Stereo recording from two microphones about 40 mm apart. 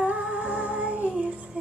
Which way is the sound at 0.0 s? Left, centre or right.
Right.